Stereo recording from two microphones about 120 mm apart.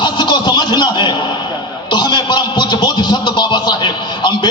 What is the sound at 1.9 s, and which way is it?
A man's voice, 40° left (ahead or behind).